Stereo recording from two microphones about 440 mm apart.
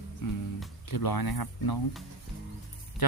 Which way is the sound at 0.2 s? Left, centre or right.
Left.